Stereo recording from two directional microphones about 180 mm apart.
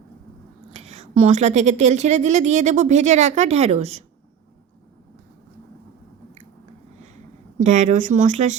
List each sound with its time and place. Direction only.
0.7 s a woman's voice: 35° right (ahead or behind)
7.6 s speech: 45° right (ahead or behind)